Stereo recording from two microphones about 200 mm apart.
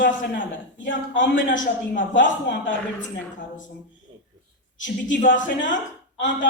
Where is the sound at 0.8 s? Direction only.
70° left (ahead or behind).